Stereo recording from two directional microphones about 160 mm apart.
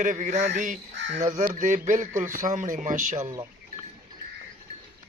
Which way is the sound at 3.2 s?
20° right (ahead or behind).